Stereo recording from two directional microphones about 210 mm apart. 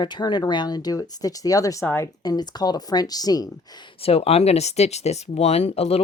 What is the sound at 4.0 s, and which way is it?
Speech, 30° left (ahead or behind).